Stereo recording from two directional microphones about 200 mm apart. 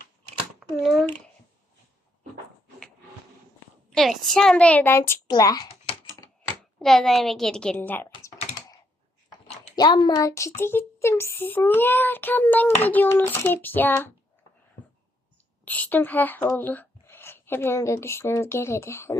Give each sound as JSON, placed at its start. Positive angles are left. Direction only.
{"t": 0.8, "sound": "a woman's voice", "side_deg": 0}
{"t": 3.8, "sound": "a child's voice", "side_deg": 0}
{"t": 5.3, "sound": "a sound", "side_deg": 20}
{"t": 6.7, "sound": "a woman's voice", "side_deg": 0}
{"t": 9.7, "sound": "a child's voice", "side_deg": 20}
{"t": 15.6, "sound": "speech", "side_deg": 5}